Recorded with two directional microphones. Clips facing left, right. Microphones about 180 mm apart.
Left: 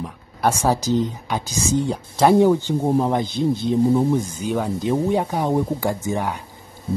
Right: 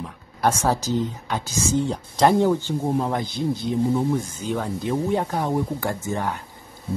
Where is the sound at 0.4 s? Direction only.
10° left (ahead or behind).